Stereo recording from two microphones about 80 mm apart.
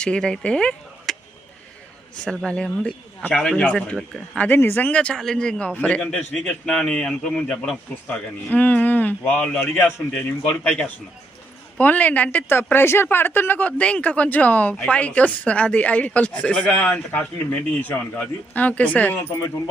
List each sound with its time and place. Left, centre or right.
0.0 s speech: centre
2.2 s speech: centre
4.4 s speech: left; by 8.2 s centre
8.4 s speech: left